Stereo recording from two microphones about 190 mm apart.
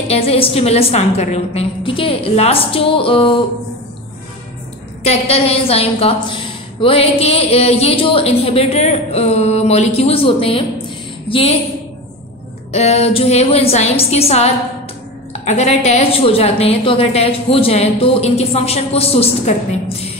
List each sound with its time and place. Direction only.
0.1 s a woman's voice: 30° left (ahead or behind)
5.0 s a woman's voice: 30° left (ahead or behind)
12.7 s a woman's voice: 35° left (ahead or behind)